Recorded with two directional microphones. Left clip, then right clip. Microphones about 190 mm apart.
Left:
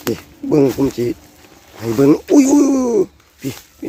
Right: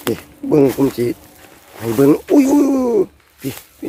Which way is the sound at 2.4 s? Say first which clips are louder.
Left 1 dB; 20° left (ahead or behind).